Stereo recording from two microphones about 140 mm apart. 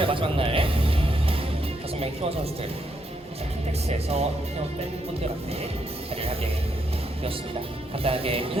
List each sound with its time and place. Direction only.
0.0 s music: 40° right (ahead or behind)
2.0 s speech: 45° right (ahead or behind)
3.8 s speech: 50° right (ahead or behind)
6.1 s speech: 45° right (ahead or behind)
7.9 s speech: 45° right (ahead or behind)